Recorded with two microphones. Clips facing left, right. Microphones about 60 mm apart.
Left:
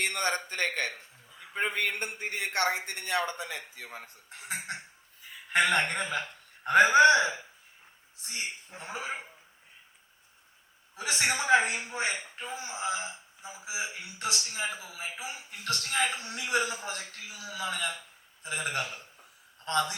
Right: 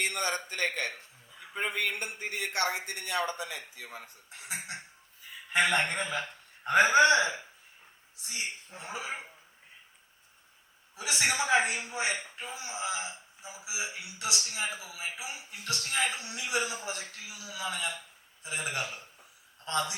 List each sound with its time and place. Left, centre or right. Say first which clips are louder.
0.1 s a man's voice: left 2 dB; left
1.5 s a man's voice: left 2 dB; left
4.3 s a sound: left 3 dB; left
5.5 s a man's voice: left 1 dB; left
8.2 s a man's voice: even; left
10.9 s a man's voice: even; left